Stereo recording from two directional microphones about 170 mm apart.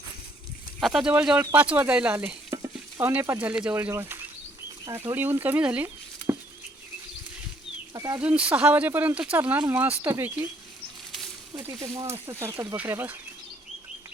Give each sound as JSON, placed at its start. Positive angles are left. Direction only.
{"t": 0.8, "sound": "speech", "side_deg": 0}
{"t": 7.9, "sound": "speech", "side_deg": -20}
{"t": 8.2, "sound": "speech", "side_deg": -10}
{"t": 11.5, "sound": "speech", "side_deg": -20}